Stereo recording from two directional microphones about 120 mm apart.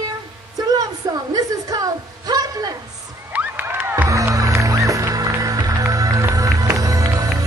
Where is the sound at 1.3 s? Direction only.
30° right (ahead or behind).